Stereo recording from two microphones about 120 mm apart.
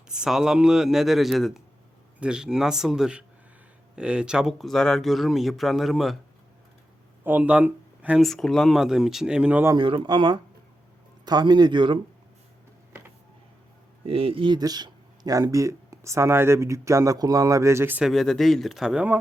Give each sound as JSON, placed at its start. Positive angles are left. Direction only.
{"t": 0.1, "sound": "speech", "side_deg": -5}
{"t": 7.3, "sound": "speech", "side_deg": -10}
{"t": 8.2, "sound": "speech", "side_deg": 5}
{"t": 9.7, "sound": "speech", "side_deg": -45}
{"t": 14.0, "sound": "speech", "side_deg": -50}
{"t": 18.0, "sound": "speech", "side_deg": 0}